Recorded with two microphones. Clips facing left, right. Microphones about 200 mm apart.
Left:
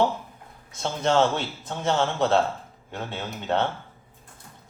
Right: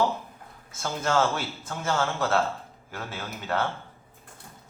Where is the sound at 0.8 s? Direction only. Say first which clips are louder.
Left 3 dB; 25° left (ahead or behind).